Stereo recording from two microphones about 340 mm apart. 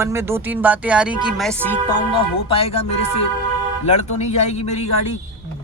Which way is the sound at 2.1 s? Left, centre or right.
Centre.